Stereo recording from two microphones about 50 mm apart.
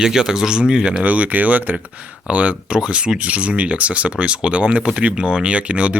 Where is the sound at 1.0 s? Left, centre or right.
Right.